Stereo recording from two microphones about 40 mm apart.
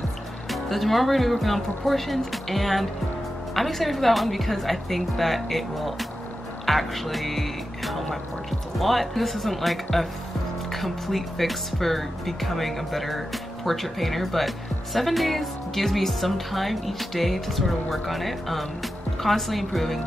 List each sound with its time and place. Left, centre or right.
0.5 s speech: centre
6.6 s music: centre
8.7 s speech: centre